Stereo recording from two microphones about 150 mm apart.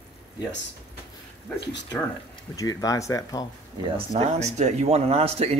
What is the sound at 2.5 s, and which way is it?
Speech, 25° left (ahead or behind).